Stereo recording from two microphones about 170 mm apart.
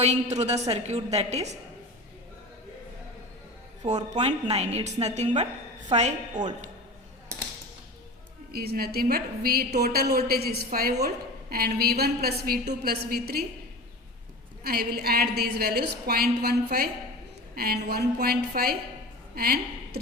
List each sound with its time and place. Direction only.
0.0 s a woman's voice: 40° right (ahead or behind)
4.1 s a woman's voice: 40° right (ahead or behind)
8.5 s a woman's voice: 65° right (ahead or behind)
14.6 s a woman's voice: 65° right (ahead or behind)